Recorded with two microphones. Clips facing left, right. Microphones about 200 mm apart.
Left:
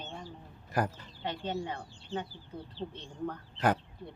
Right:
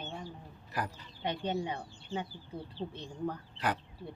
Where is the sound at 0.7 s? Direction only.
45° left (ahead or behind).